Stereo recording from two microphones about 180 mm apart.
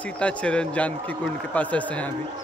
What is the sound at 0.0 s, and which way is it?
A man's voice, 5° left (ahead or behind).